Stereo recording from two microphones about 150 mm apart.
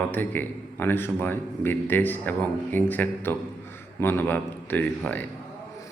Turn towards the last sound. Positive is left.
turn(degrees=10)  # may be behind; listen again after turning